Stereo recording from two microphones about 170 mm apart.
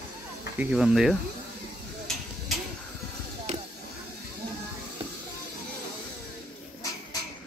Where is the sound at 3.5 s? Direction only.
45° right (ahead or behind).